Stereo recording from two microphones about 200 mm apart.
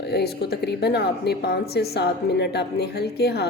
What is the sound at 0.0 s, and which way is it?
A woman's voice, 55° left (ahead or behind).